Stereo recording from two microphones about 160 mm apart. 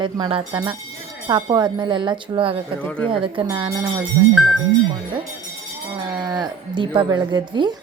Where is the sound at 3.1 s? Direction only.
35° right (ahead or behind).